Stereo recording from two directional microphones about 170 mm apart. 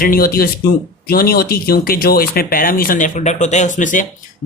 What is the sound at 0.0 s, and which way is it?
Speech, 60° left (ahead or behind).